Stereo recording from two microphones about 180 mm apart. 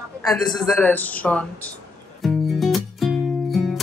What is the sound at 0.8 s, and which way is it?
Speech, 10° left (ahead or behind).